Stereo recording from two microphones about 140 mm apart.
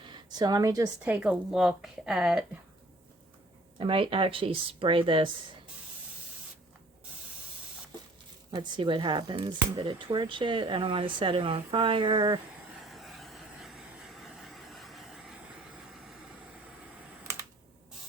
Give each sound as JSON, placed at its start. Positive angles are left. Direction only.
{"t": 0.0, "sound": "a sound", "side_deg": -30}
{"t": 1.0, "sound": "a woman's voice", "side_deg": -10}
{"t": 3.8, "sound": "speech", "side_deg": -40}
{"t": 8.5, "sound": "speech", "side_deg": -35}
{"t": 12.8, "sound": "vehicle", "side_deg": 0}